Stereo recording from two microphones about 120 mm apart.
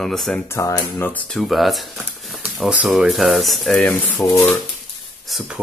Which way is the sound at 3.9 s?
15° left (ahead or behind).